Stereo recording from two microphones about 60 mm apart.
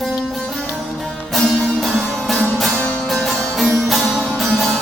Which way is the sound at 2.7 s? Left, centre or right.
Centre.